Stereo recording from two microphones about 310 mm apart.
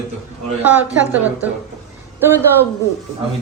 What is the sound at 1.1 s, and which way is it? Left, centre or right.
Speech, centre.